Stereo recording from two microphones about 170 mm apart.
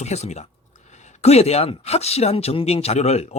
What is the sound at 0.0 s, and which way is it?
Speech, 40° left (ahead or behind).